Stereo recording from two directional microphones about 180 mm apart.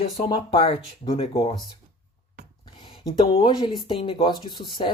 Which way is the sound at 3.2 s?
25° left (ahead or behind).